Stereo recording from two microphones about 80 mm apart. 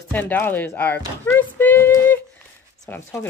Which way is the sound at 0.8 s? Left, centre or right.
Left.